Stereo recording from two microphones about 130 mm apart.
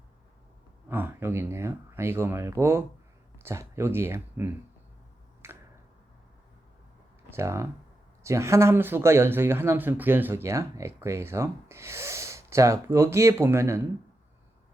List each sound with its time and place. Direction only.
0.9 s speech: 15° right (ahead or behind)
5.4 s finger snapping: 20° right (ahead or behind)
7.3 s speech: 20° right (ahead or behind)